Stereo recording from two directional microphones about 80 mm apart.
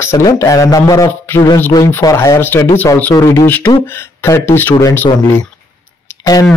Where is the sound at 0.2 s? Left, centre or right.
Left.